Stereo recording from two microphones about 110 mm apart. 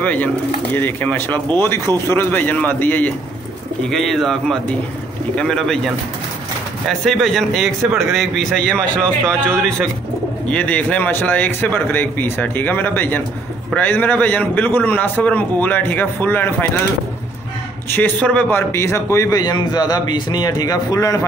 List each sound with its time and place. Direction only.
0.0 s a man's voice: 15° left (ahead or behind)
3.8 s a man's voice: centre (ahead or behind); by 16.6 s 20° left (ahead or behind)
17.8 s a man's voice: 20° left (ahead or behind)
19.4 s speech: 40° left (ahead or behind)